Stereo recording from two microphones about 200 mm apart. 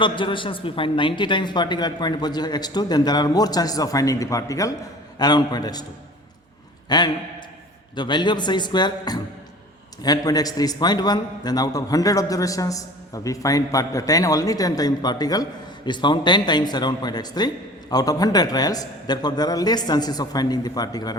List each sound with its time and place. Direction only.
0.0 s a man's voice: 25° left (ahead or behind)
6.8 s a man's voice: 20° left (ahead or behind)